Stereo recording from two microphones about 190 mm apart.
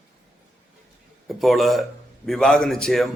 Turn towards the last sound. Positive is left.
turn(degrees=5)  # may be behind; listen again after turning